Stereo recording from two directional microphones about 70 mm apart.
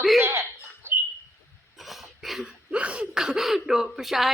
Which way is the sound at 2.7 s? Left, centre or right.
Centre.